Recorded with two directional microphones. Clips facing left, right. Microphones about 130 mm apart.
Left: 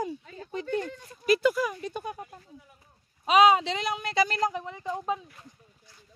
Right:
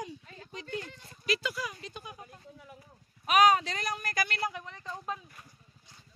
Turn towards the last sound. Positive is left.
turn(degrees=15)  # may be behind; listen again after turning